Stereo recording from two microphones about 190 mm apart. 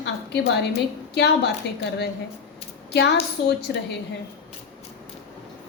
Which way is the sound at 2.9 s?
60° left (ahead or behind).